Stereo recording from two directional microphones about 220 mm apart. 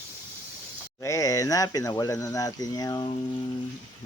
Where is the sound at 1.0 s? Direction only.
15° left (ahead or behind).